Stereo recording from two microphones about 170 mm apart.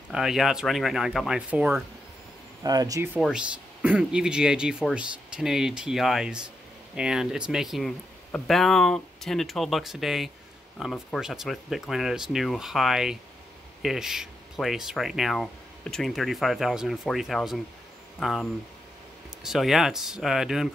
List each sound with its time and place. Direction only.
0.1 s speech: 5° right (ahead or behind)
2.6 s speech: 20° right (ahead or behind)
3.2 s speech: 5° right (ahead or behind)